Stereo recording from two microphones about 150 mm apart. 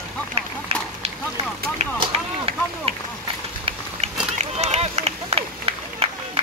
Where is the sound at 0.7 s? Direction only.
40° right (ahead or behind).